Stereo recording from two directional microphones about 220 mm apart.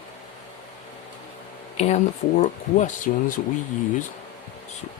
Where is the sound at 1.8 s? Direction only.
30° left (ahead or behind).